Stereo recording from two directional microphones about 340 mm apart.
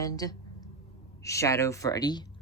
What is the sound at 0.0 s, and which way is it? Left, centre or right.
Speech, centre.